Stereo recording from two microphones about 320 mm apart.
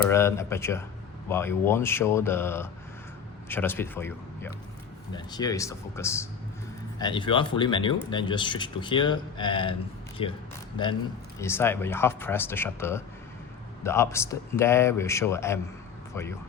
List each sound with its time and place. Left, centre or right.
0.1 s speech: centre
11.3 s speech: centre